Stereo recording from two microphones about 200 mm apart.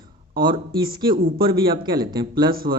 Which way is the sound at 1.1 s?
45° right (ahead or behind).